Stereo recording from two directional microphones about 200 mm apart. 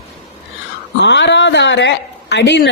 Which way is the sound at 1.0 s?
60° left (ahead or behind).